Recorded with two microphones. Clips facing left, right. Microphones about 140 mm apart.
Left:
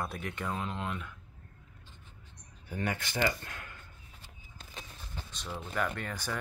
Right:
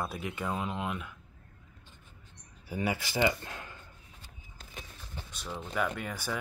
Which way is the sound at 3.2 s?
20° right (ahead or behind).